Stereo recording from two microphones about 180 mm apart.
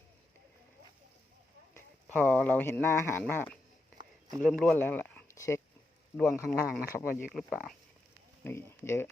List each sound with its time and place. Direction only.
2.1 s speech: 15° right (ahead or behind)
2.4 s speech: 10° left (ahead or behind)
7.1 s speech: 55° left (ahead or behind)
7.3 s speech: centre (ahead or behind)
8.4 s speech: 15° left (ahead or behind)